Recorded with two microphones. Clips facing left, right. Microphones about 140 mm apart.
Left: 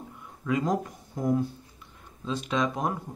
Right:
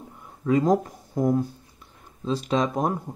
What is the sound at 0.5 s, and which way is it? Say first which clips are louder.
Speech: right 6 dB; 35° right (ahead or behind).